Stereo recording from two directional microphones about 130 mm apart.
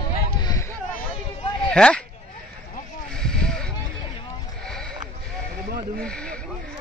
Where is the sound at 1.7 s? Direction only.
5° left (ahead or behind).